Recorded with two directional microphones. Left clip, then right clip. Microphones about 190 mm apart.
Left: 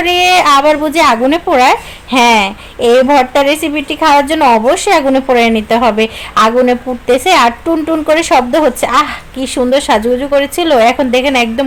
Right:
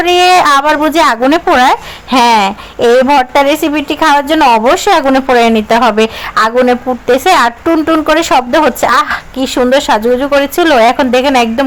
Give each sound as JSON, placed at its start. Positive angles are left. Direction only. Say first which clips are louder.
{"t": 0.0, "sound": "a woman's voice", "louder": "right 2 dB", "side_deg": -20}